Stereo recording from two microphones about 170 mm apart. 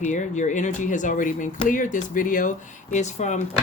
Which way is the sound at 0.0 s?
45° left (ahead or behind).